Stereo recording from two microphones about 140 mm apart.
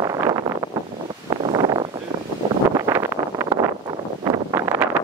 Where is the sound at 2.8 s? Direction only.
20° right (ahead or behind).